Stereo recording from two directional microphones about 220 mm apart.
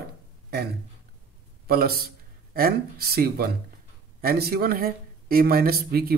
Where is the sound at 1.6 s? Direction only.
45° right (ahead or behind).